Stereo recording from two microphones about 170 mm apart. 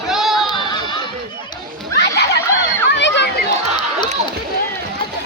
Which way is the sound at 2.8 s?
90° left.